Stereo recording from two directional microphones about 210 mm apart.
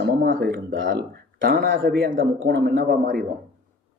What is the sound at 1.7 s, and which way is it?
Speech, 60° right (ahead or behind).